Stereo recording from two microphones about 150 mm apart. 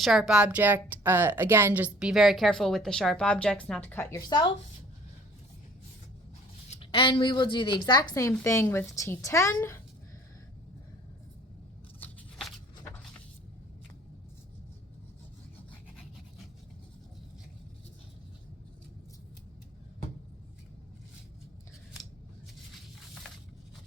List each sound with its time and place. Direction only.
0.0 s a woman's voice: 5° right (ahead or behind); by 4.2 s 15° left (ahead or behind)
6.7 s a woman's voice: 35° left (ahead or behind); by 9.8 s 15° left (ahead or behind)
12.8 s vehicle: 10° left (ahead or behind)